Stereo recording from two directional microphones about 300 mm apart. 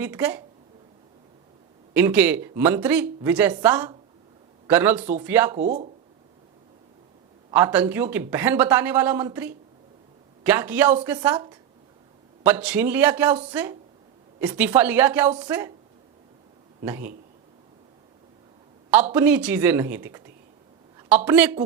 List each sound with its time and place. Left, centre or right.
0.0 s speech: centre
1.9 s speech: centre
5.5 s speech: right
7.5 s a woman's voice: centre
16.8 s speech: centre
19.1 s a woman's voice: centre